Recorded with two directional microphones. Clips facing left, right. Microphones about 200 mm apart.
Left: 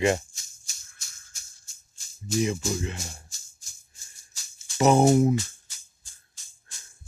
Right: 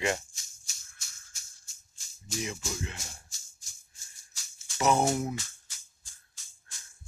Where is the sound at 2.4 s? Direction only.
35° left (ahead or behind).